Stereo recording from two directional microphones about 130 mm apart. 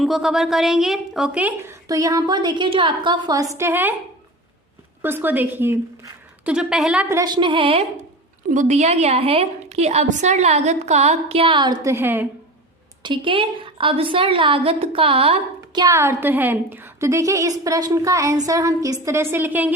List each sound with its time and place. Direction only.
0.0 s a woman's voice: centre (ahead or behind); by 3.4 s 35° right (ahead or behind)
3.5 s a woman's voice: 20° right (ahead or behind)
5.0 s a woman's voice: 15° right (ahead or behind)
6.4 s a woman's voice: 5° right (ahead or behind)
7.1 s a woman's voice: 30° right (ahead or behind)
8.4 s a woman's voice: 75° right (ahead or behind); by 11.9 s 35° right (ahead or behind)
11.9 s a woman's voice: 20° right (ahead or behind)
13.0 s a woman's voice: 40° right (ahead or behind)
15.8 s a woman's voice: 25° right (ahead or behind)